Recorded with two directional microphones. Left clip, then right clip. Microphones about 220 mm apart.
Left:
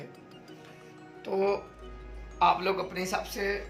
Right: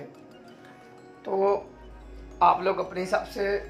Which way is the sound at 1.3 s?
30° left (ahead or behind).